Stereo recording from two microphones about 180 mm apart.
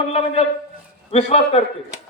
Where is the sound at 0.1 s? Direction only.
35° left (ahead or behind).